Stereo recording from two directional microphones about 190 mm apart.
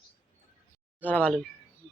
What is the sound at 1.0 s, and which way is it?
Speech, 10° left (ahead or behind).